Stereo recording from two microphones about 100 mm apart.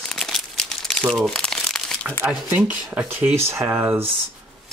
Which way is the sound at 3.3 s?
25° right (ahead or behind).